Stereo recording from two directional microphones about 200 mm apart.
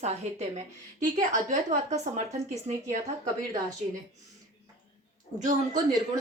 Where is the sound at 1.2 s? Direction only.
40° right (ahead or behind).